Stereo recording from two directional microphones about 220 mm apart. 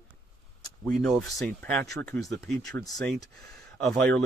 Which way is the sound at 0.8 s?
Centre (ahead or behind).